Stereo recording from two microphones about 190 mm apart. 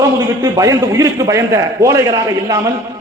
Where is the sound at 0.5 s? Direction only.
15° right (ahead or behind).